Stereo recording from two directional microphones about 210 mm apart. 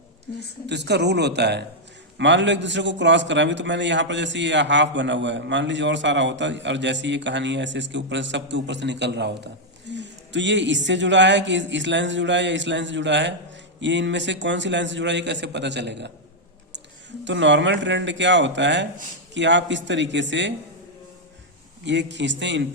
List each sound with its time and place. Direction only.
0.7 s a man's voice: 55° right (ahead or behind)
17.2 s a man's voice: 60° right (ahead or behind)
21.8 s a man's voice: 55° right (ahead or behind)